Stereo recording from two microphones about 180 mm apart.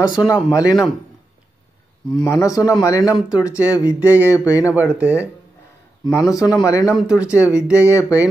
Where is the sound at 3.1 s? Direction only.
5° right (ahead or behind).